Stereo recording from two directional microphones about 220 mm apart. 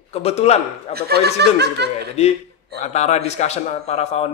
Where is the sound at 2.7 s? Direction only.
30° left (ahead or behind).